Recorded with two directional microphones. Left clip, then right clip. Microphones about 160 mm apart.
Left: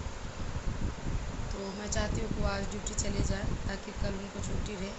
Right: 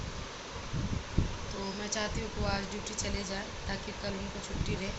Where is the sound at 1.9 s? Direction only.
10° left (ahead or behind).